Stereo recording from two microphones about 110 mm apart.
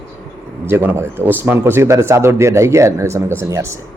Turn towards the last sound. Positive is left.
turn(degrees=-25)  # may be behind; listen again after turning